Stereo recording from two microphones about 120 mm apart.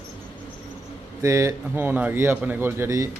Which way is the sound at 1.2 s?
25° right (ahead or behind).